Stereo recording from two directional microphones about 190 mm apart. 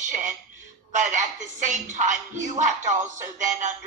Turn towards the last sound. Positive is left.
turn(degrees=-40)  # may be behind; listen again after turning